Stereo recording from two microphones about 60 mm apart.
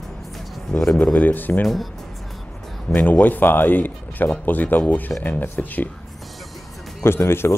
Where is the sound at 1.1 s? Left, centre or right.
Left.